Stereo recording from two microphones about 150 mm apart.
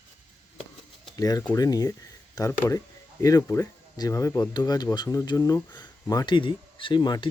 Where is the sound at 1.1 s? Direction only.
25° left (ahead or behind).